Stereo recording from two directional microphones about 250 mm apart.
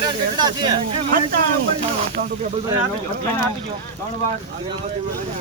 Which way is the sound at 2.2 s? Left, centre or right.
Right.